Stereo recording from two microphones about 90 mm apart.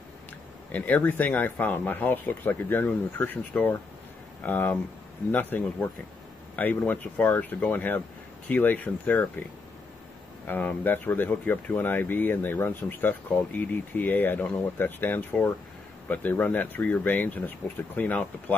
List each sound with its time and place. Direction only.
0.7 s speech: 15° left (ahead or behind)
10.4 s speech: 20° left (ahead or behind)